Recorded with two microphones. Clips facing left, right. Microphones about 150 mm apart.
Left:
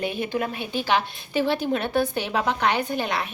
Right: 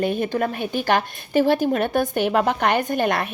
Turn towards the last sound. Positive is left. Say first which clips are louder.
# right 5 dB
turn(degrees=-55)  # may be behind; listen again after turning